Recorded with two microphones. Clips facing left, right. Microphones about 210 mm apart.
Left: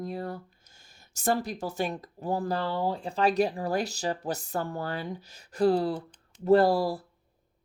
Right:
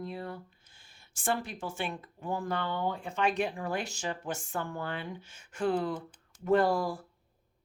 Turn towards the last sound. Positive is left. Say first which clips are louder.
# left 4 dB
turn(degrees=35)  # may be behind; listen again after turning